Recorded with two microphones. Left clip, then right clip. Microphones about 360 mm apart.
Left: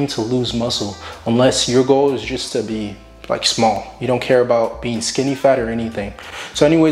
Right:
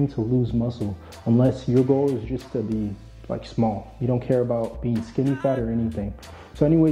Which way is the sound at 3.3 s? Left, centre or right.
Centre.